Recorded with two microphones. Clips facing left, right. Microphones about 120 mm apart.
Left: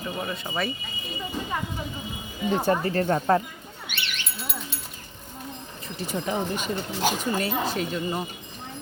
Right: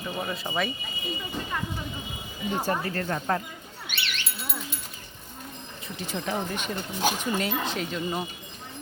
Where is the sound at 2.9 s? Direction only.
30° left (ahead or behind).